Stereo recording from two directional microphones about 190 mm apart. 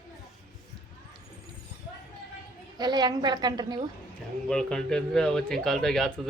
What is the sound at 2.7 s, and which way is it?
A woman's voice, 20° right (ahead or behind).